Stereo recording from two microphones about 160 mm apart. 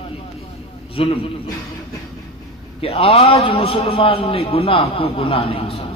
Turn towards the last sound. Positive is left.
turn(degrees=35)  # may be behind; listen again after turning